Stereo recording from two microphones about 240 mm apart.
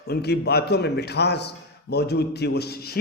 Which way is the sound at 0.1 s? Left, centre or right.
Left.